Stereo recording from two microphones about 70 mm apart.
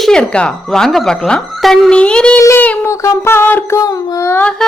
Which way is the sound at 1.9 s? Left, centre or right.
Centre.